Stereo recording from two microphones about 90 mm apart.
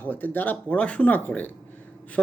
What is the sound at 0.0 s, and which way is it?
Speech, 20° left (ahead or behind).